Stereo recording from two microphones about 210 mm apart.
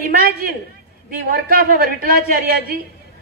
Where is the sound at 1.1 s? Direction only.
45° right (ahead or behind).